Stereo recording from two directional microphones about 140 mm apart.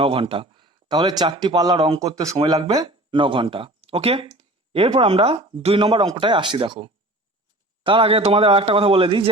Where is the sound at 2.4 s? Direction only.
35° right (ahead or behind).